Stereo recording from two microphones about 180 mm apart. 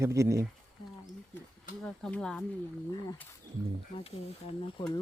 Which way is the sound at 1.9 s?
5° left (ahead or behind).